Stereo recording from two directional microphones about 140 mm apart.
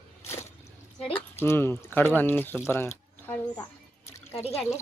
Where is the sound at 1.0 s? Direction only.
15° left (ahead or behind).